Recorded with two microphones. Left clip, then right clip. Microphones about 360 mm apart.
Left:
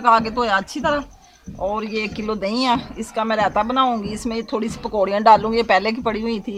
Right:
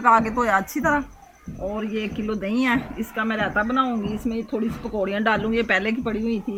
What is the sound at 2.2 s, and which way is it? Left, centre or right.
Speech, centre.